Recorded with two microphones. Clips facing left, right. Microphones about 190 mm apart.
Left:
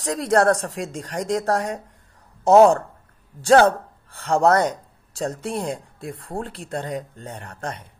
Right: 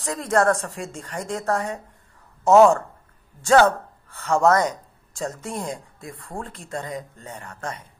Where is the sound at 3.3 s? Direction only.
35° left (ahead or behind).